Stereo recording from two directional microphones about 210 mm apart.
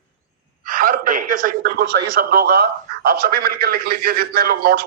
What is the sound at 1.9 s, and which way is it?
A man's voice, 50° right (ahead or behind).